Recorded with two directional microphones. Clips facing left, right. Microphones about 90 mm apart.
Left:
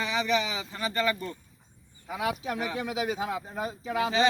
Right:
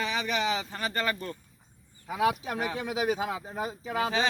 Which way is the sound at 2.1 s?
35° right (ahead or behind).